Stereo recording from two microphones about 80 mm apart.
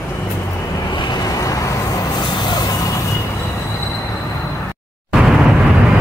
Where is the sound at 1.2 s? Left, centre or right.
Left.